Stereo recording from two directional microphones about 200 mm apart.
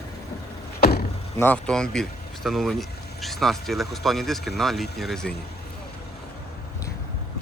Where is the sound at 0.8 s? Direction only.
50° left (ahead or behind).